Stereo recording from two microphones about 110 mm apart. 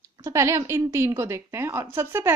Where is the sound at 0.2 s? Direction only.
25° right (ahead or behind).